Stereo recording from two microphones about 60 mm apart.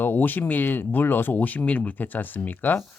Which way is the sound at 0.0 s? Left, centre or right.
Left.